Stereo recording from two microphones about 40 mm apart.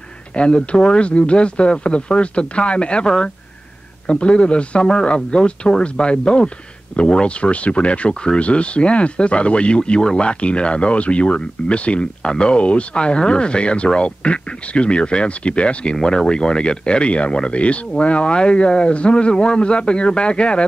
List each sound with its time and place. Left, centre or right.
0.4 s speech: left
4.1 s speech: left